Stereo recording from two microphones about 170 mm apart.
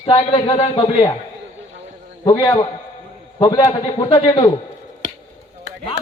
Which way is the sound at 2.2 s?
20° left (ahead or behind).